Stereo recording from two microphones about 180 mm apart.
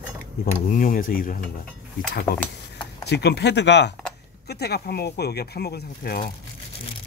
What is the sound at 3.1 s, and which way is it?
Speech, 70° left (ahead or behind).